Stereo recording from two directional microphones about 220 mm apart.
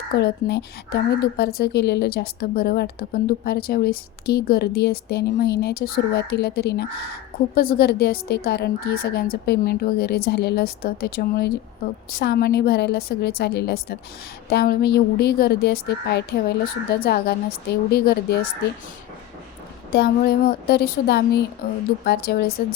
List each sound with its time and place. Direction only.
0.2 s a woman's voice: 50° left (ahead or behind)
19.9 s a woman's voice: 45° left (ahead or behind)